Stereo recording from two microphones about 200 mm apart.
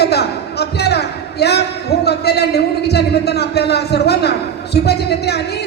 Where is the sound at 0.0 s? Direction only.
55° left (ahead or behind).